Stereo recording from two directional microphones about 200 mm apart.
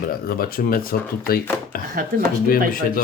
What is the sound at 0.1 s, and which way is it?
Speech, 45° left (ahead or behind).